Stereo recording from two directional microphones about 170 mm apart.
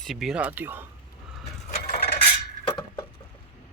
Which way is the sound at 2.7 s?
25° left (ahead or behind).